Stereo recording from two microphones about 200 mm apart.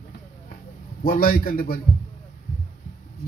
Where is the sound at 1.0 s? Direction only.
45° left (ahead or behind).